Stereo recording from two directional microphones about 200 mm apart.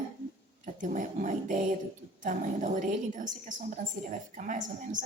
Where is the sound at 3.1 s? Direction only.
40° right (ahead or behind).